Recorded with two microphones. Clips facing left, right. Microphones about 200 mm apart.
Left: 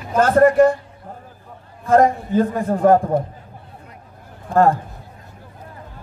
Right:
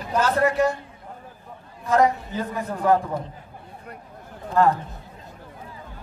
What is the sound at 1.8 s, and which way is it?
A man's voice, 50° left (ahead or behind).